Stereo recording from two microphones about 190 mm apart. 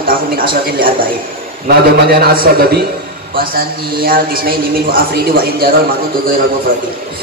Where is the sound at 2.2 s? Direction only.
50° right (ahead or behind).